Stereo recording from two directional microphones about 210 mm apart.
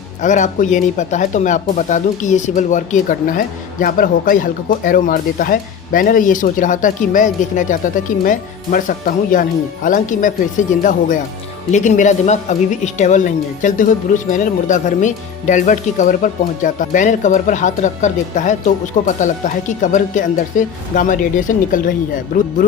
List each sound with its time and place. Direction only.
0.2 s speech: 35° left (ahead or behind)
11.7 s speech: 35° left (ahead or behind)